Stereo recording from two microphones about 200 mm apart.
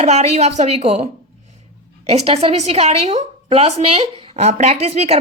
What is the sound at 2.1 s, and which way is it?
A woman's voice, 30° right (ahead or behind).